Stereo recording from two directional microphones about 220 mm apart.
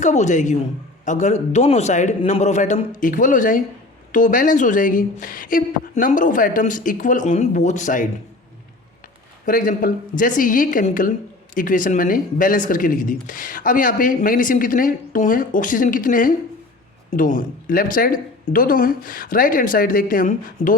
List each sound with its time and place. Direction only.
0.0 s speech: 30° left (ahead or behind)
9.5 s speech: 40° left (ahead or behind)